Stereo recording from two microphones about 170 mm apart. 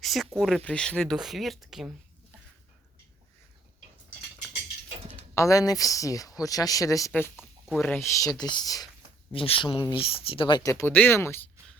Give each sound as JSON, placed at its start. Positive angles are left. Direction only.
{"t": 0.0, "sound": "a sound", "side_deg": 0}
{"t": 0.6, "sound": "speech", "side_deg": 5}
{"t": 5.3, "sound": "speech", "side_deg": 20}
{"t": 9.3, "sound": "speech", "side_deg": 35}